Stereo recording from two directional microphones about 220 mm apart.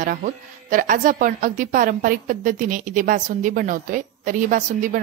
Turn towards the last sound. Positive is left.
turn(degrees=-35)  # may be behind; listen again after turning